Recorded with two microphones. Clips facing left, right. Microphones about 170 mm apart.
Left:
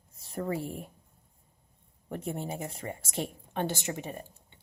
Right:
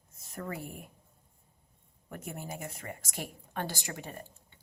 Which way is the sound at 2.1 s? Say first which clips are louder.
Left 6 dB; 30° left (ahead or behind).